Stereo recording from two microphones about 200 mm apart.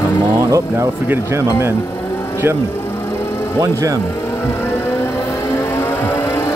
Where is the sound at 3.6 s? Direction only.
15° right (ahead or behind).